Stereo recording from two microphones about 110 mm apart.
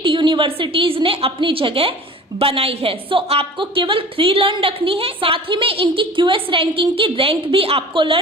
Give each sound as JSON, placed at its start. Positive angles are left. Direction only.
{"t": 0.0, "sound": "a woman's voice", "side_deg": -50}